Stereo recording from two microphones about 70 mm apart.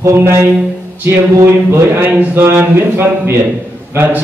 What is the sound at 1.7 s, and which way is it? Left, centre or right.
A man's voice, right.